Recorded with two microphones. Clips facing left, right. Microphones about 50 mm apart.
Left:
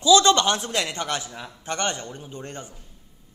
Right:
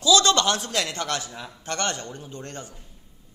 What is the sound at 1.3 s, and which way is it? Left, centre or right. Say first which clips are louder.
Speech: even; centre.